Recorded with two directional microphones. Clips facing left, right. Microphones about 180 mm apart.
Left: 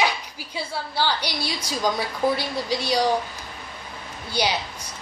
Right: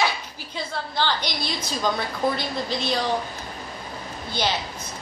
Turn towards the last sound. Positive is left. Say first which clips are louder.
# left 1 dB
turn(degrees=10)  # may be behind; listen again after turning